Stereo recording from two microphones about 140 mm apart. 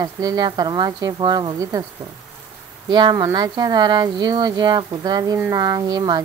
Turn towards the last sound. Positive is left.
turn(degrees=-30)  # may be behind; listen again after turning